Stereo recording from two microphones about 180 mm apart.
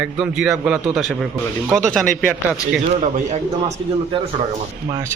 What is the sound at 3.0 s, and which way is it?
Speech, 40° right (ahead or behind).